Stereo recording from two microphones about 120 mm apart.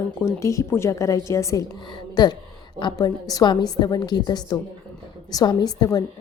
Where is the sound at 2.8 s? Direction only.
35° left (ahead or behind).